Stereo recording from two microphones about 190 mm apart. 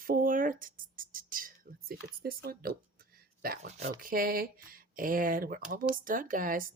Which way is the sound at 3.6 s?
40° right (ahead or behind).